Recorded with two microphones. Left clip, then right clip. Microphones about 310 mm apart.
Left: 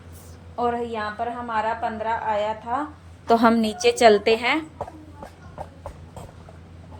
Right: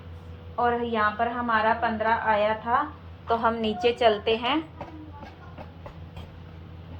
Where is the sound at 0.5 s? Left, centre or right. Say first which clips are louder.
Even; left.